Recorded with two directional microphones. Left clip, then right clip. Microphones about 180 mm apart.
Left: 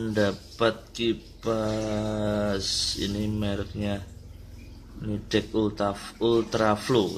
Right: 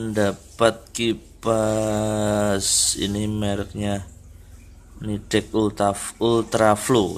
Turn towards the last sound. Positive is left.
turn(degrees=-25)  # may be behind; listen again after turning